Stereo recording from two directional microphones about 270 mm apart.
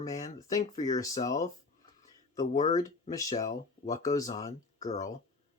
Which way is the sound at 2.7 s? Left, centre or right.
Centre.